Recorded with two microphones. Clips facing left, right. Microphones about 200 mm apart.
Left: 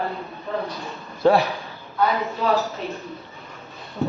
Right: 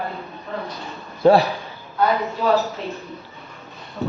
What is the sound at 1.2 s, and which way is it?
Speech, 15° right (ahead or behind).